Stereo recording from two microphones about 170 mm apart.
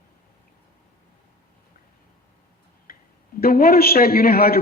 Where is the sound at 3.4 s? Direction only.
60° left (ahead or behind).